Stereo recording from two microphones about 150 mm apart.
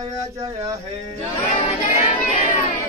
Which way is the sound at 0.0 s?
20° right (ahead or behind).